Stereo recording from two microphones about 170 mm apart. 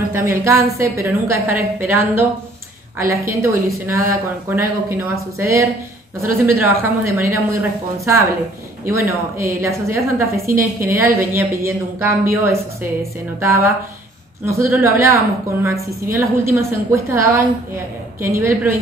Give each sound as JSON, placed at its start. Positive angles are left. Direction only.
{"t": 0.1, "sound": "a woman's voice", "side_deg": -15}
{"t": 8.8, "sound": "a woman's voice", "side_deg": -15}